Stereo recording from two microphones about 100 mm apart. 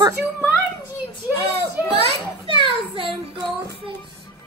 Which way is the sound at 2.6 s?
60° right (ahead or behind).